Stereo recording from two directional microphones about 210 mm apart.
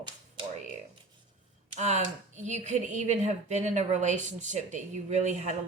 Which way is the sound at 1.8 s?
35° right (ahead or behind).